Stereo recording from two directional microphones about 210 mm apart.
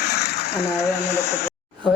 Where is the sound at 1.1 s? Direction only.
15° left (ahead or behind).